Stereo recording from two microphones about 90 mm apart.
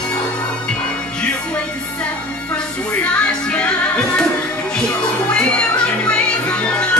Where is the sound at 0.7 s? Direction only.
15° left (ahead or behind).